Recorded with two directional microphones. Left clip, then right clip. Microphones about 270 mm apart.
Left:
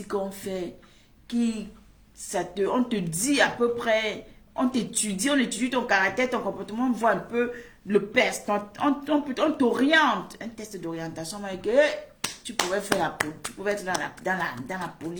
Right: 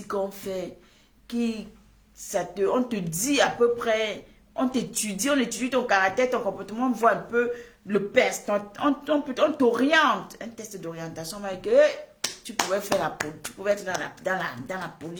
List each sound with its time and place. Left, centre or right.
0.1 s a woman's voice: centre
13.2 s speech: centre
13.7 s a woman's voice: centre